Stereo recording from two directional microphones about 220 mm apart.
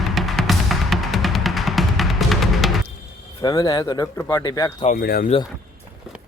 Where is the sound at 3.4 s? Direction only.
15° left (ahead or behind).